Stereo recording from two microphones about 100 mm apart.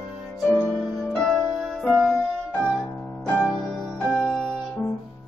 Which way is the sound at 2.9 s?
5° left (ahead or behind).